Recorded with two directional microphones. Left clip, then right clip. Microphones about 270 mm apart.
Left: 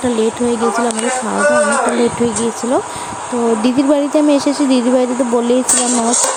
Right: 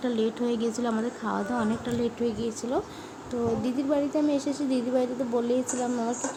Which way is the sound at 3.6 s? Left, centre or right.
Left.